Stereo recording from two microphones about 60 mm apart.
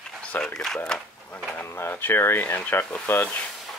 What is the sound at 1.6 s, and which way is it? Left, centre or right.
Speech, left.